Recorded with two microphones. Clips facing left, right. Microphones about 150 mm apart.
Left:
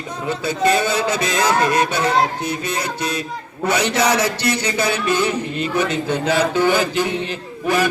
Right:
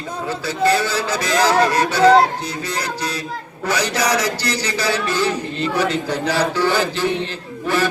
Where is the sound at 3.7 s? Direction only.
25° left (ahead or behind).